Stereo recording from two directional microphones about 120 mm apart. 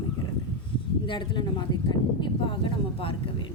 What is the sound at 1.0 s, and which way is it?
A woman's voice, 40° left (ahead or behind).